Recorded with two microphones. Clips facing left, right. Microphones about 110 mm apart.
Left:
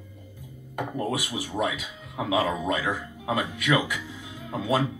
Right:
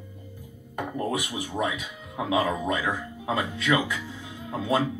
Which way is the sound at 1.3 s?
25° right (ahead or behind).